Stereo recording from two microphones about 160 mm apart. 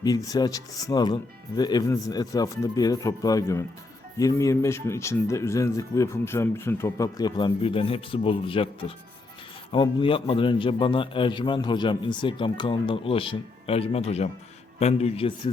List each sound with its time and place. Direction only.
0.0 s a man's voice: 25° left (ahead or behind); by 15.3 s 40° left (ahead or behind)